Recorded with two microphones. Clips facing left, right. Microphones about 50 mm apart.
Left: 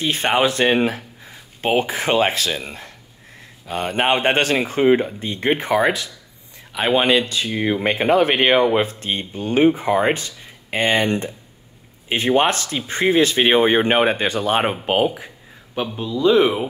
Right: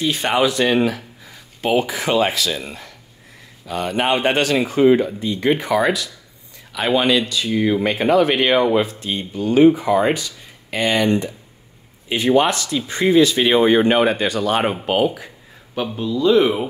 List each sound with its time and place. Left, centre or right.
0.0 s speech: left
3.6 s speech: left; by 16.6 s centre